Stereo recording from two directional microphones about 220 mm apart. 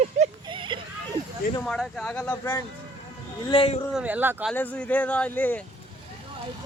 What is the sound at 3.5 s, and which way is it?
Speech, 25° left (ahead or behind).